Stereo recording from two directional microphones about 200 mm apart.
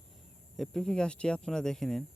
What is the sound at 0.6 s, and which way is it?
Speech, 5° left (ahead or behind).